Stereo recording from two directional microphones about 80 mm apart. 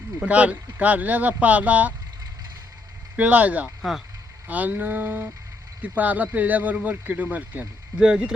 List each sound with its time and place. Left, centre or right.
0.3 s speech: centre
3.2 s speech: centre
3.8 s speech: centre
4.4 s speech: centre